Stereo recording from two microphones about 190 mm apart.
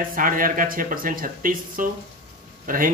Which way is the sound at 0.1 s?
45° right (ahead or behind).